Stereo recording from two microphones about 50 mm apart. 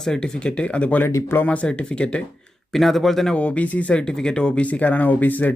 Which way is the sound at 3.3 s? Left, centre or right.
Left.